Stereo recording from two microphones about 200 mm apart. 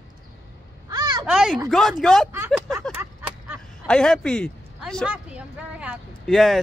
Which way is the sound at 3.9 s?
5° left (ahead or behind).